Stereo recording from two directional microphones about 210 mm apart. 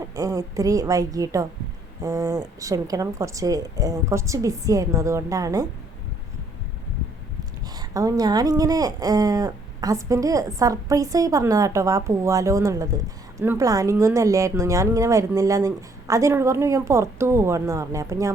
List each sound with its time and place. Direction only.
0.2 s speech: 15° right (ahead or behind)
7.8 s speech: 15° right (ahead or behind)